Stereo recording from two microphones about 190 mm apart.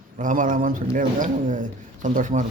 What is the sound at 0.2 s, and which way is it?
A man's voice, 45° right (ahead or behind).